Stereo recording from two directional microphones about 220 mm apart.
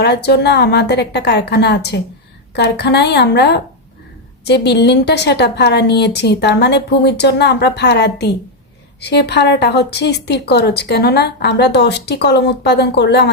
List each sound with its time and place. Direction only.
0.0 s speech: 50° left (ahead or behind)